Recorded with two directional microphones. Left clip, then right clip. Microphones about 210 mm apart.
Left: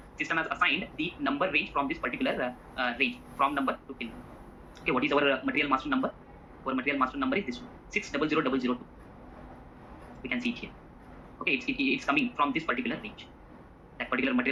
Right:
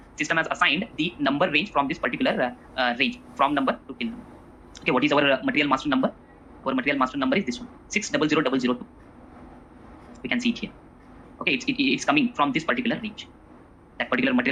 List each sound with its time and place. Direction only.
0.2 s speech: 60° right (ahead or behind)
10.2 s speech: 60° right (ahead or behind)